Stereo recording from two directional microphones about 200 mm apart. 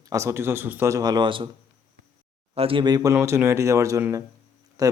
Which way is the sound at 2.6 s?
25° right (ahead or behind).